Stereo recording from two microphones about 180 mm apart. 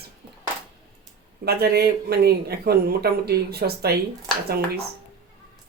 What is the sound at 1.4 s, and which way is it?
Speech, 60° right (ahead or behind).